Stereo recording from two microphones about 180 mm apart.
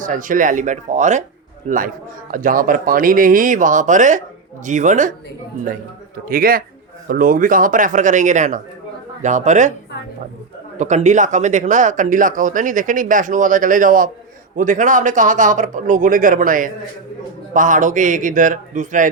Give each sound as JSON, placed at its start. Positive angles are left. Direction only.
{"t": 0.0, "sound": "speech", "side_deg": -45}
{"t": 2.3, "sound": "speech", "side_deg": -50}
{"t": 6.2, "sound": "speech", "side_deg": -55}
{"t": 10.8, "sound": "speech", "side_deg": -40}